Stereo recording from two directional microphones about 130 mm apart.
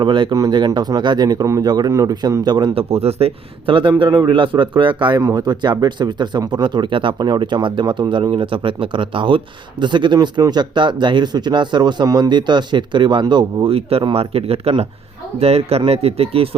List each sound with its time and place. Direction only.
0.0 s speech: 35° right (ahead or behind)